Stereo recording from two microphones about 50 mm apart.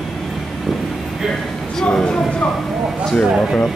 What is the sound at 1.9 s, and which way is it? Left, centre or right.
Speech, centre.